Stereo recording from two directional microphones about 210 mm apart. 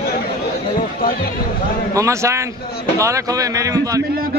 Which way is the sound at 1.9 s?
15° right (ahead or behind).